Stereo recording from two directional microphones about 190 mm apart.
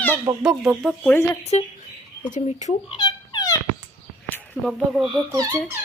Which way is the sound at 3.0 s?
20° left (ahead or behind).